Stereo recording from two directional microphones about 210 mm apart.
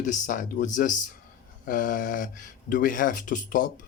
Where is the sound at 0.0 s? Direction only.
35° left (ahead or behind).